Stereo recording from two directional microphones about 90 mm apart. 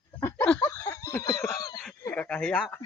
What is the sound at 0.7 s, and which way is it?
Snicker, 35° left (ahead or behind).